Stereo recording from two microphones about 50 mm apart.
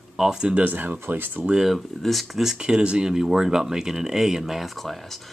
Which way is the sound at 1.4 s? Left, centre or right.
Centre.